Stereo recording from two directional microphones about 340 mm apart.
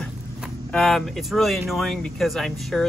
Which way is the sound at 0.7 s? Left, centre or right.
Centre.